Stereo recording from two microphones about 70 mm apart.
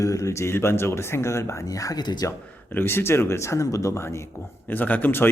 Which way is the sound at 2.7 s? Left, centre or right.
Left.